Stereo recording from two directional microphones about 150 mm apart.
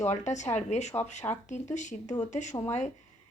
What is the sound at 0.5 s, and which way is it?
Speech, 50° left (ahead or behind).